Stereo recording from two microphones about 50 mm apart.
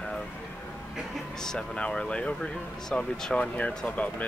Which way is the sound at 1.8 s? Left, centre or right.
Left.